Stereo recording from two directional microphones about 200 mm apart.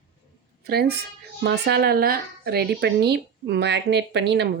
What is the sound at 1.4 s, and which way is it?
Speech, 55° right (ahead or behind).